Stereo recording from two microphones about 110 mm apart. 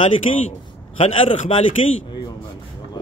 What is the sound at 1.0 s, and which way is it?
Speech, 55° left (ahead or behind).